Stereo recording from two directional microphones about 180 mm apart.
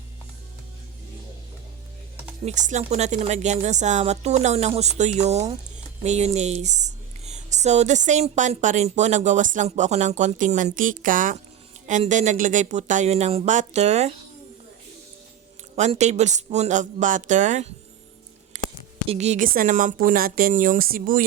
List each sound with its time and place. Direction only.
2.4 s speech: 40° right (ahead or behind)
15.7 s speech: 35° right (ahead or behind)
18.5 s a sound: 45° right (ahead or behind)
19.0 s speech: 35° right (ahead or behind); by 21.2 s 55° right (ahead or behind)